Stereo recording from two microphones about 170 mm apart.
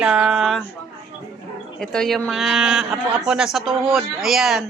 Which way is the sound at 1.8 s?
5° left (ahead or behind).